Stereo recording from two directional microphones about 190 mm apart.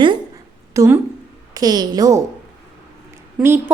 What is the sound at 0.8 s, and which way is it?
Speech, 15° right (ahead or behind).